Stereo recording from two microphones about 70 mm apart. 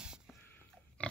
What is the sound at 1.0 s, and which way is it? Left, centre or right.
Pig, centre.